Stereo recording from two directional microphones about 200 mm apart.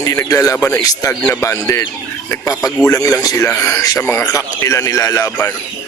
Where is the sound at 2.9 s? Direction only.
15° left (ahead or behind).